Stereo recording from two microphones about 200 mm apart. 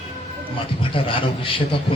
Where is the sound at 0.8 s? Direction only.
25° left (ahead or behind).